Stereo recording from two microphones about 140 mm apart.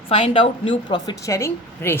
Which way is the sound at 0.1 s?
45° left (ahead or behind).